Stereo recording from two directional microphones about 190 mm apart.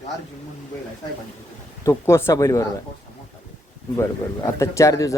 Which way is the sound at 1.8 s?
15° left (ahead or behind).